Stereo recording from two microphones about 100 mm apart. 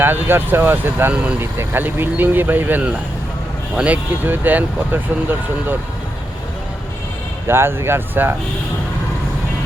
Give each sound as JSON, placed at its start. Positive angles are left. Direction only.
{"t": 0.0, "sound": "speech", "side_deg": -20}
{"t": 1.4, "sound": "speech", "side_deg": -20}
{"t": 7.4, "sound": "speech", "side_deg": -25}